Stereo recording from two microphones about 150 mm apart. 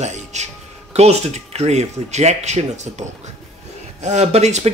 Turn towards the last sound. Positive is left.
turn(degrees=-45)  # may be behind; listen again after turning